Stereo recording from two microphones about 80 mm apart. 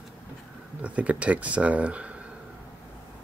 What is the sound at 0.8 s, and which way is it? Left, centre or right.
Speech, centre.